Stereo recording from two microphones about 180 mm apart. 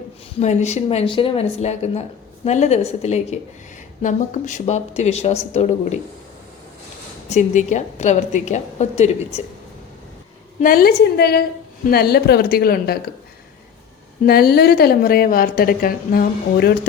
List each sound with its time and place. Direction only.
0.3 s speech: 40° left (ahead or behind)
7.3 s speech: 40° left (ahead or behind)
10.6 s a woman's voice: 55° left (ahead or behind)
14.3 s a woman's voice: 60° left (ahead or behind)